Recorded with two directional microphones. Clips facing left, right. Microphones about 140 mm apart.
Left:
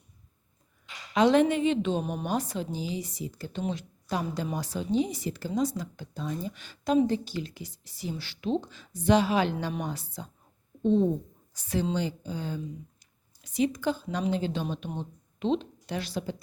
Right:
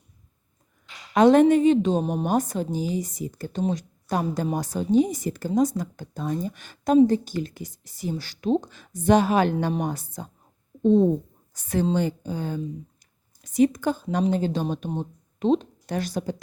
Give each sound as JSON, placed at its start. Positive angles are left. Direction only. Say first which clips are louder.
{"t": 1.1, "sound": "speech", "louder": "right 6 dB", "side_deg": -50}
{"t": 11.5, "sound": "speech", "louder": "right 5 dB", "side_deg": -50}